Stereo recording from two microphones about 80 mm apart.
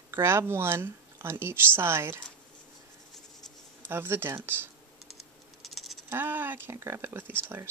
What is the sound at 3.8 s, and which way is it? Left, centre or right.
Speech, right.